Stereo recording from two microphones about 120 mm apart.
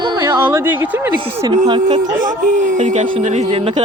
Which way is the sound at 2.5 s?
85° right.